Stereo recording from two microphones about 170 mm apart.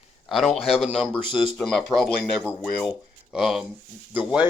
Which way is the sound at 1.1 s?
30° left (ahead or behind).